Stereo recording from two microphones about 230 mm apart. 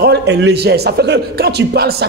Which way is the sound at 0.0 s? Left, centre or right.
Right.